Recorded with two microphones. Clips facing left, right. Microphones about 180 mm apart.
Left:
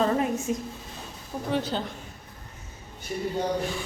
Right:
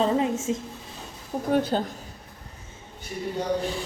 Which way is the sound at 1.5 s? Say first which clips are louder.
Right 5 dB; 50° right (ahead or behind).